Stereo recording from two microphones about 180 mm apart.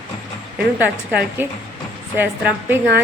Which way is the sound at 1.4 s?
10° right (ahead or behind).